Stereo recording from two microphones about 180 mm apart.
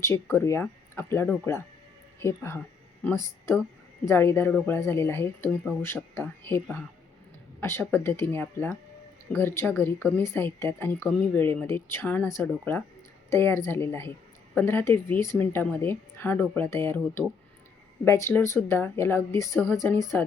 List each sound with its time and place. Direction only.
0.0 s speech: 15° left (ahead or behind)